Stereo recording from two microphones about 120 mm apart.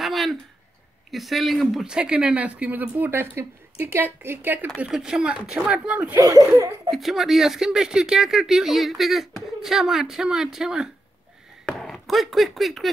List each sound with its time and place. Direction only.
0.0 s a sound: centre (ahead or behind)
1.1 s speech: centre (ahead or behind)
4.8 s speech: 5° right (ahead or behind)
6.1 s speech: 25° right (ahead or behind)
6.9 s speech: centre (ahead or behind)